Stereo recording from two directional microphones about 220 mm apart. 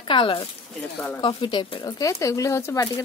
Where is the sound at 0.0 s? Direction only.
20° left (ahead or behind).